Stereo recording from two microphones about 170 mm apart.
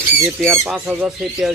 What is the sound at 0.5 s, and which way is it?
Speech, centre (ahead or behind).